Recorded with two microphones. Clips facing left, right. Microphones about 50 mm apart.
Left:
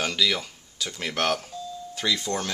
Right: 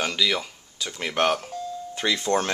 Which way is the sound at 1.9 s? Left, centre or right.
Right.